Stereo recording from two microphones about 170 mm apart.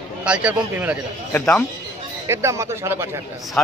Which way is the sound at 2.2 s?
15° right (ahead or behind).